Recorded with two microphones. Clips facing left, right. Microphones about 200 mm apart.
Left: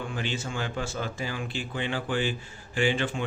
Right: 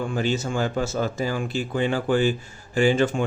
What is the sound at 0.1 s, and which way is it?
Speech, 40° right (ahead or behind).